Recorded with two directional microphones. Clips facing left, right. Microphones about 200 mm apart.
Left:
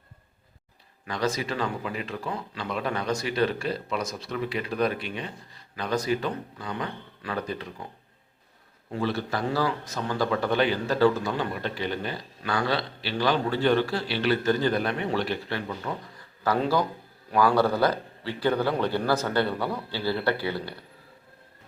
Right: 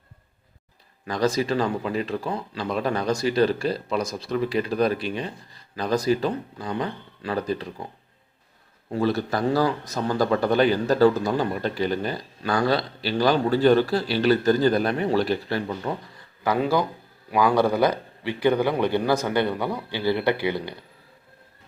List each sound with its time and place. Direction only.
1.0 s a man's voice: 40° right (ahead or behind)
8.9 s a man's voice: 40° right (ahead or behind)
16.4 s a man's voice: 15° right (ahead or behind)